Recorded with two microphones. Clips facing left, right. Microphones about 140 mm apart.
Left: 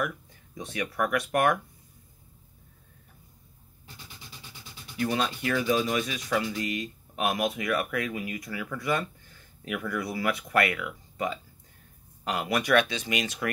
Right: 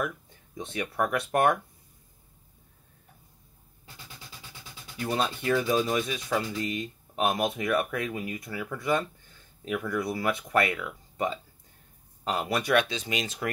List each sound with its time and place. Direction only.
0.6 s speech: 25° right (ahead or behind)
5.1 s speech: 25° right (ahead or behind)